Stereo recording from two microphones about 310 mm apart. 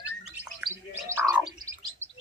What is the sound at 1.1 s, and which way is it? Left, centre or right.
Frog, centre.